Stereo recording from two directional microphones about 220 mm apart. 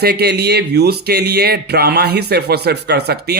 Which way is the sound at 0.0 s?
45° right (ahead or behind).